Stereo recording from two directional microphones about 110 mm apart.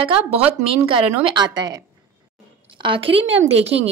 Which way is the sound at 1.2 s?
40° right (ahead or behind).